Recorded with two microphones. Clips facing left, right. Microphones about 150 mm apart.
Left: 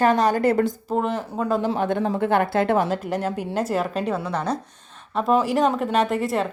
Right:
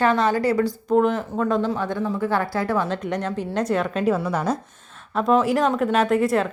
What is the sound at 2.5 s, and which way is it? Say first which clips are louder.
Speech: left 4 dB; 25° left (ahead or behind).